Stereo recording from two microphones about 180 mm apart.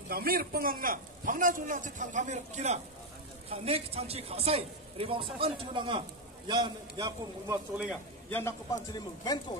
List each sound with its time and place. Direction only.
0.1 s a man's voice: 55° right (ahead or behind); by 7.5 s 20° right (ahead or behind)
7.7 s a man's voice: 5° right (ahead or behind)
8.3 s a man's voice: 15° left (ahead or behind)